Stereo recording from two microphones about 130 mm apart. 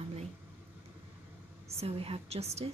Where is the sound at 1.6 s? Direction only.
50° right (ahead or behind).